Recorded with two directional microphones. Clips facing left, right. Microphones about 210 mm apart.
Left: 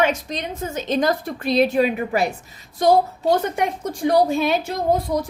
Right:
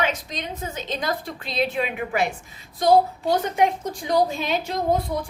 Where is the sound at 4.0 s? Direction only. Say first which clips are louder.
Left 5 dB; 50° left (ahead or behind).